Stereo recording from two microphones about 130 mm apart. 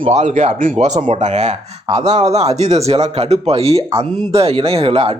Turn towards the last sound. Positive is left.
turn(degrees=-45)  # may be behind; listen again after turning